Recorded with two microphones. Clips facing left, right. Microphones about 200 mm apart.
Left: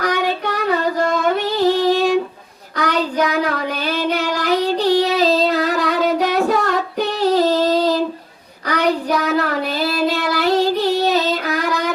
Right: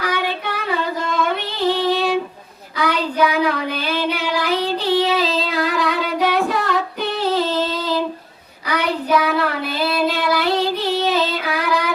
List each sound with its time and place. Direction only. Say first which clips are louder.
0.0 s female singing: left 3 dB; 40° left (ahead or behind)
2.8 s child singing: even; 40° left (ahead or behind)